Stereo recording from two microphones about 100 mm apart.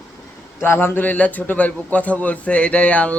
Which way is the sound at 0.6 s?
20° left (ahead or behind).